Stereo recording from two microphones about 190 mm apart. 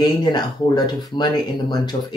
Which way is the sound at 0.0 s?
20° left (ahead or behind).